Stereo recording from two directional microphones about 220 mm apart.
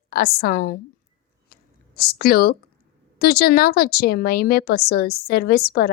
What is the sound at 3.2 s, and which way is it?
A woman's voice, 45° left (ahead or behind).